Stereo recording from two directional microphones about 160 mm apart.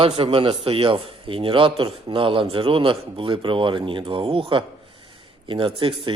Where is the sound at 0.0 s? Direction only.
35° right (ahead or behind).